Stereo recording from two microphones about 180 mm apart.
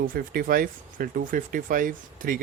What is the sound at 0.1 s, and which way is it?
Speech, 55° right (ahead or behind).